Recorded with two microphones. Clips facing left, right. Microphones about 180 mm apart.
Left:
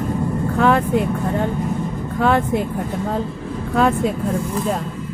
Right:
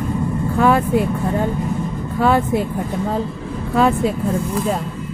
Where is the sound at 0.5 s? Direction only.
5° right (ahead or behind).